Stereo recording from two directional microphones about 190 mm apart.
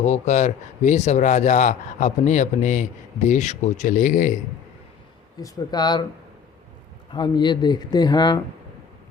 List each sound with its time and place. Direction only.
0.0 s speech: 40° left (ahead or behind)
5.4 s speech: 20° left (ahead or behind)
7.1 s speech: 25° left (ahead or behind)